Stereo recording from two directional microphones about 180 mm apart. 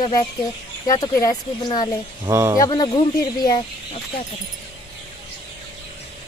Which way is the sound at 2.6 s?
25° left (ahead or behind).